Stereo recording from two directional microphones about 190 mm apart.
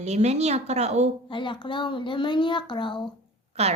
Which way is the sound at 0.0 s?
35° right (ahead or behind).